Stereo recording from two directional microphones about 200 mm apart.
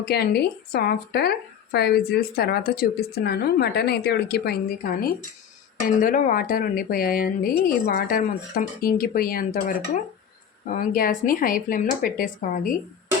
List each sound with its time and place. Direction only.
0.0 s speech: 50° left (ahead or behind)